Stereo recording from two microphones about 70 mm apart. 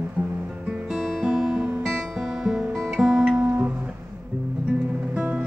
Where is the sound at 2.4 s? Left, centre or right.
Centre.